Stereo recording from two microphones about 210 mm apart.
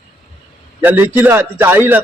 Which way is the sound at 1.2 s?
10° right (ahead or behind).